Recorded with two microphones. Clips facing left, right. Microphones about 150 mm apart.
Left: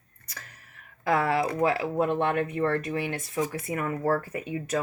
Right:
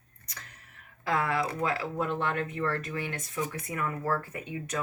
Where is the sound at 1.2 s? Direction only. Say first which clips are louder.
Left 5 dB; 25° left (ahead or behind).